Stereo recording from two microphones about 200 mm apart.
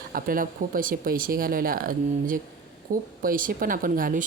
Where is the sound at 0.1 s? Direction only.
45° right (ahead or behind).